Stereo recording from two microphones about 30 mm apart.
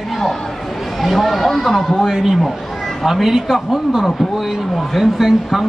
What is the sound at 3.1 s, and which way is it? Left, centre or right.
Speech, centre.